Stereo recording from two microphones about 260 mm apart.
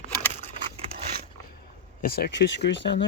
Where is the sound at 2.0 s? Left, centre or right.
Left.